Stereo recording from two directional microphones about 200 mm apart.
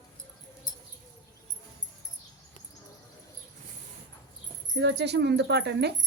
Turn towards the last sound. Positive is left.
turn(degrees=-55)  # may be behind; listen again after turning